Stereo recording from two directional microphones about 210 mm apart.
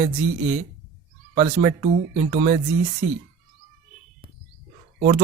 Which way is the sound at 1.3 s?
30° right (ahead or behind).